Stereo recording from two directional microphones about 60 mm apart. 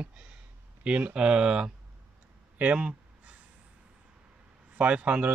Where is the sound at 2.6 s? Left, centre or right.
Centre.